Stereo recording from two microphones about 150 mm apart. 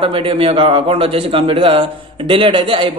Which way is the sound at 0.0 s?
40° right (ahead or behind).